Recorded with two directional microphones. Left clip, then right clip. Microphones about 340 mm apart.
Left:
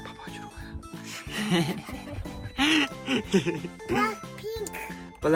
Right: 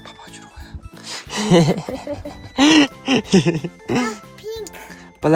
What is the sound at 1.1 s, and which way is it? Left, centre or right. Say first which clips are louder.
Speech: right 11 dB; centre.